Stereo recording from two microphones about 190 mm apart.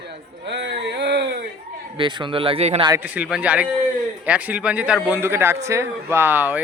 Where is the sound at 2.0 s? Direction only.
25° right (ahead or behind).